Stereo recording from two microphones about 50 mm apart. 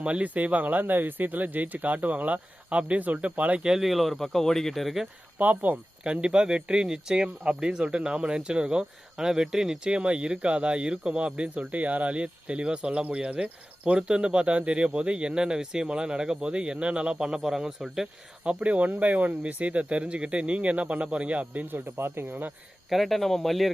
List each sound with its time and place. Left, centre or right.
0.0 s speech: right
3.6 s speech: centre
3.8 s speech: centre
5.4 s speech: right
6.1 s speech: centre
9.9 s speech: right
18.4 s speech: right
21.9 s speech: right
22.9 s speech: centre